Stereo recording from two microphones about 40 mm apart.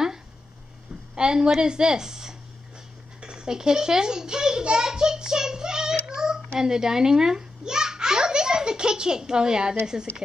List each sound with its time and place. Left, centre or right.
1.1 s a woman's voice: right
6.0 s child singing: centre
6.6 s a child's voice: centre